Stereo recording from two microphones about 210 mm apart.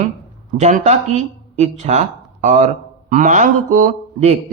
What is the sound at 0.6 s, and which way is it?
A man's voice, 35° right (ahead or behind).